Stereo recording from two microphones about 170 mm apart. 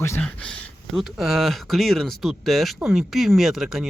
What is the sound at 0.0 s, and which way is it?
Speech, 15° left (ahead or behind).